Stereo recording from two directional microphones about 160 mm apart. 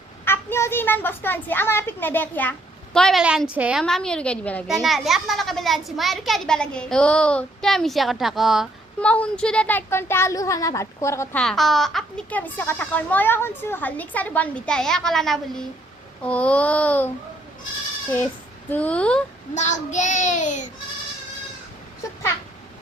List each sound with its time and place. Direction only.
0.3 s a child's voice: 15° left (ahead or behind)
11.3 s a child's voice: centre (ahead or behind)
18.7 s a child's voice: 10° left (ahead or behind)
19.5 s child singing: 50° left (ahead or behind)